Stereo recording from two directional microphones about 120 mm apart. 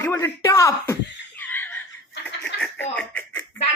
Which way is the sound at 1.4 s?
15° left (ahead or behind).